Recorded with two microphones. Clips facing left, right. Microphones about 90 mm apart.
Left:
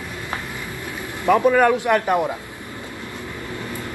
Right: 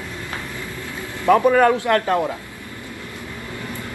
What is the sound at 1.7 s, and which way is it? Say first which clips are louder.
Speech: even; 15° left (ahead or behind).